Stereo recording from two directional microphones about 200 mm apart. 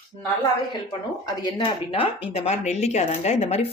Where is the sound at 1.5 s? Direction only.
25° left (ahead or behind).